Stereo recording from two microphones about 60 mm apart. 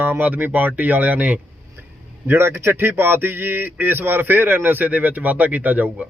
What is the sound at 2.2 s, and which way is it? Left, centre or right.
Speech, right.